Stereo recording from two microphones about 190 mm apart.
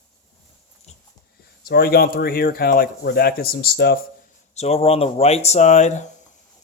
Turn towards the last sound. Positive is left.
turn(degrees=40)  # may be behind; listen again after turning